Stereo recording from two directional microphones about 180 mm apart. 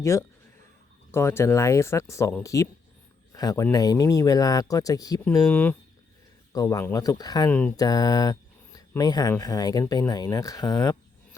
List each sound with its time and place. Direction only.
0.0 s speech: 15° left (ahead or behind)
7.5 s speech: 10° left (ahead or behind)
7.8 s speech: 20° left (ahead or behind)